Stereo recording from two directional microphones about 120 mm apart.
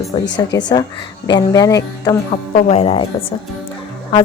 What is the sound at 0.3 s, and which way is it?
A woman's voice, 35° left (ahead or behind).